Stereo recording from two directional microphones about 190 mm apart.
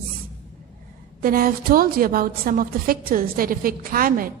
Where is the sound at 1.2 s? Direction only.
50° right (ahead or behind).